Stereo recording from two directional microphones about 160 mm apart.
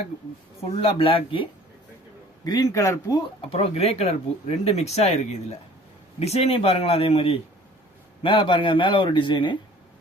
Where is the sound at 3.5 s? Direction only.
40° left (ahead or behind).